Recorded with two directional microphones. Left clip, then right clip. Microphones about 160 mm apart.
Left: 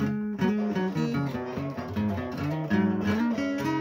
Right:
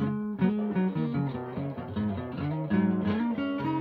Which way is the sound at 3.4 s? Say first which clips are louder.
Left 2 dB; 15° right (ahead or behind).